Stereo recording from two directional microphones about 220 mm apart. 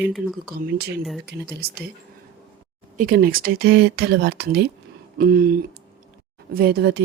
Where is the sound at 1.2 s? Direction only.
45° right (ahead or behind).